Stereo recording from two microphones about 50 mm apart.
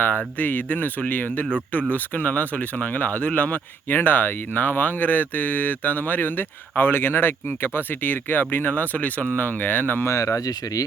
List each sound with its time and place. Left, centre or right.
0.3 s speech: left
10.1 s speech: left